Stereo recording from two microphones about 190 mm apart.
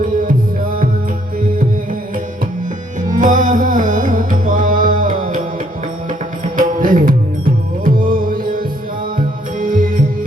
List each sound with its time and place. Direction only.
0.0 s music: 45° right (ahead or behind)
3.1 s music: 45° right (ahead or behind)